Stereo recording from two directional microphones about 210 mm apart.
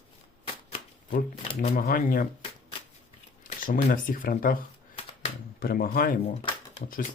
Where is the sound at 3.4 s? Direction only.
40° left (ahead or behind).